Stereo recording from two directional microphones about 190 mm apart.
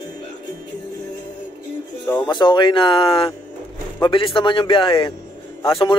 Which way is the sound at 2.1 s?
25° left (ahead or behind).